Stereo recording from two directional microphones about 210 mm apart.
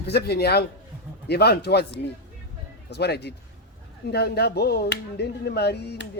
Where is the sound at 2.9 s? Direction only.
50° left (ahead or behind).